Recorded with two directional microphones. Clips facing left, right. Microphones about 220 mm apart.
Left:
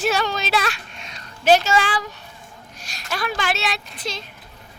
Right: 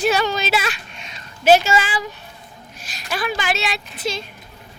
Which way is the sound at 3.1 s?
5° right (ahead or behind).